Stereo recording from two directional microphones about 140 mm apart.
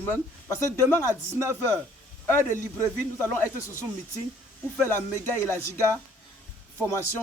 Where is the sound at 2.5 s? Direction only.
15° left (ahead or behind).